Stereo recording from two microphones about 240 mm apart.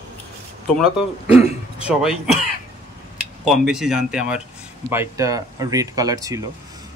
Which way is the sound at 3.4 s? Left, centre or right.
Centre.